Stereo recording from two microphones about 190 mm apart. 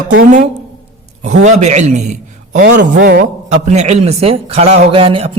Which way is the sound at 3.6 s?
35° right (ahead or behind).